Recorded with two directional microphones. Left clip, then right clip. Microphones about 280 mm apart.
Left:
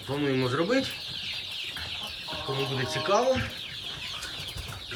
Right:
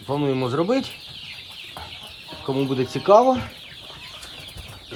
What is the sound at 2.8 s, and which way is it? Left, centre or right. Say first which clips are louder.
Speech: right 11 dB; centre.